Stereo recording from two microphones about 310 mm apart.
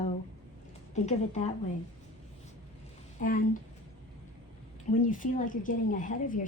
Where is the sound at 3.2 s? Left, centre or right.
Left.